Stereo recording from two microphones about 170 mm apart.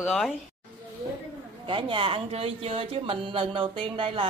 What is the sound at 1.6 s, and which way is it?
Speech, 30° right (ahead or behind).